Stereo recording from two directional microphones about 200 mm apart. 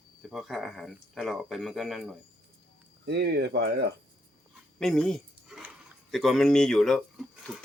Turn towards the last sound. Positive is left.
turn(degrees=0)  # may be behind; listen again after turning